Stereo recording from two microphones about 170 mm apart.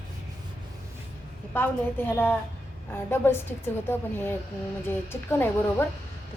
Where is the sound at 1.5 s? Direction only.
10° left (ahead or behind).